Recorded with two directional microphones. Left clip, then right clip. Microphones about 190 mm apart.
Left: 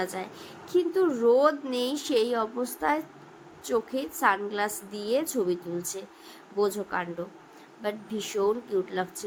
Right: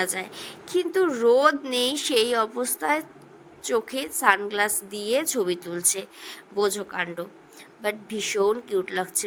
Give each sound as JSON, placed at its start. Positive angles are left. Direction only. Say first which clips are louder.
{"t": 0.0, "sound": "a woman's voice", "louder": "right 4 dB", "side_deg": -45}